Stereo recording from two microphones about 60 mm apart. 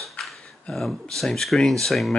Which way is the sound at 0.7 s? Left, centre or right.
Centre.